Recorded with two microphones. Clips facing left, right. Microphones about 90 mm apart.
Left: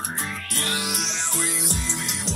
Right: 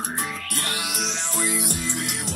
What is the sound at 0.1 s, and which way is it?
Music, 15° right (ahead or behind).